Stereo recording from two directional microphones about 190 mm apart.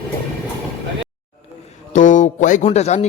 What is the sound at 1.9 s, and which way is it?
A man's voice, 40° left (ahead or behind).